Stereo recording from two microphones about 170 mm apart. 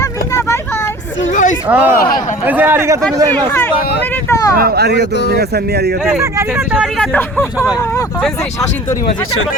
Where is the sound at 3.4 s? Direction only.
10° left (ahead or behind).